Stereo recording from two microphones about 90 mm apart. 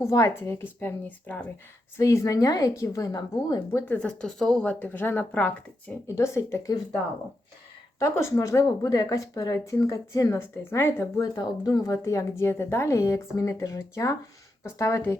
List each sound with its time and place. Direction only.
0.0 s speech: 35° left (ahead or behind); by 1.5 s 20° left (ahead or behind)
2.0 s speech: 35° left (ahead or behind)
3.8 s a woman's voice: 10° left (ahead or behind)
6.1 s speech: 30° left (ahead or behind)
7.9 s speech: 30° left (ahead or behind)
11.2 s speech: 45° left (ahead or behind)